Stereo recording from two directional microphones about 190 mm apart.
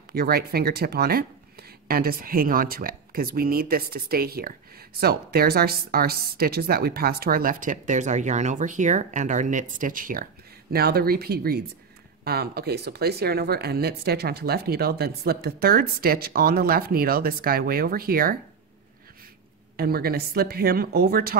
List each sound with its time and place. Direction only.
0.1 s a woman's voice: 55° right (ahead or behind)
19.8 s a woman's voice: 55° right (ahead or behind)